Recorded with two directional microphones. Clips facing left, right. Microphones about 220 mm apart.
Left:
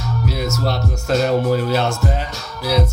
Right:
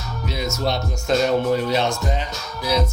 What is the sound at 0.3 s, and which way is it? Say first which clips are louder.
Music: left 2 dB; 5° left (ahead or behind).